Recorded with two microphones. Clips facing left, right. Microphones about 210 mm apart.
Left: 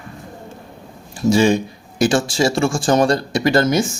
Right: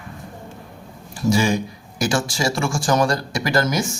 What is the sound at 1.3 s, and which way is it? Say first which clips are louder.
Speech: left 6 dB; 25° left (ahead or behind).